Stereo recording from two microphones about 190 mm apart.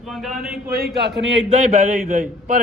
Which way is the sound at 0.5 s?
55° right (ahead or behind).